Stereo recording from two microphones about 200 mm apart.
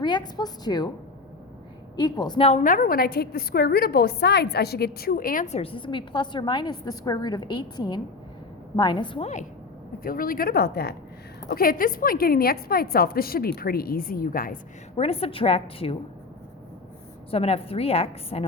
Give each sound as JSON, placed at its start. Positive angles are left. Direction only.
{"t": 0.0, "sound": "a woman's voice", "side_deg": 20}
{"t": 2.0, "sound": "a woman's voice", "side_deg": 20}
{"t": 10.0, "sound": "a woman's voice", "side_deg": 45}
{"t": 15.0, "sound": "a woman's voice", "side_deg": 30}
{"t": 17.3, "sound": "a woman's voice", "side_deg": 30}